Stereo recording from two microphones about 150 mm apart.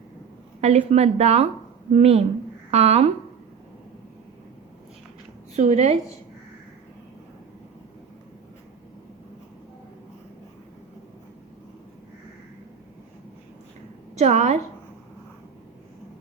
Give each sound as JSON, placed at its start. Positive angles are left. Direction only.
{"t": 0.6, "sound": "a woman's voice", "side_deg": -45}
{"t": 5.5, "sound": "speech", "side_deg": -50}
{"t": 14.2, "sound": "speech", "side_deg": -50}